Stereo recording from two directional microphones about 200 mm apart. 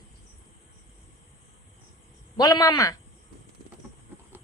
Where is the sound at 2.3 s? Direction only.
20° left (ahead or behind).